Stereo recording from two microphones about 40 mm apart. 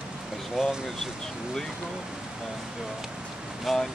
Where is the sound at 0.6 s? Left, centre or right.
Centre.